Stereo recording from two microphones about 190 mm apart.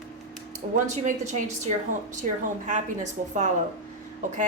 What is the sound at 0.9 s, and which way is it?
A woman's voice, 35° right (ahead or behind).